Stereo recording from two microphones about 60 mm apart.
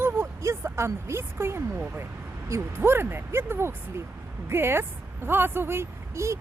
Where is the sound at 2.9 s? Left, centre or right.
Right.